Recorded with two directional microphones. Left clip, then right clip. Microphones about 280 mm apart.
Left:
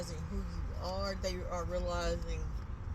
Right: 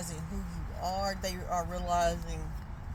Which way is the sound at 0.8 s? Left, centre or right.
Right.